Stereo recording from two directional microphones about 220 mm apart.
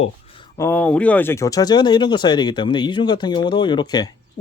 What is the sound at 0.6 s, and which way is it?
Speech, 10° left (ahead or behind).